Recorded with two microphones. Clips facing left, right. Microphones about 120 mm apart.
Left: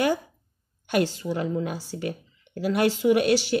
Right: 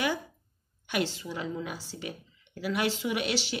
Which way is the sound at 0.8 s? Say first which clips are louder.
Left 7 dB; 45° left (ahead or behind).